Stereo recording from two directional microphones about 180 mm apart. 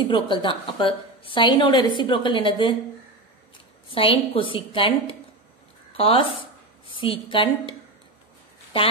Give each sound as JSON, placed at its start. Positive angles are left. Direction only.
{"t": 0.0, "sound": "a woman's voice", "side_deg": 25}
{"t": 3.9, "sound": "a woman's voice", "side_deg": 30}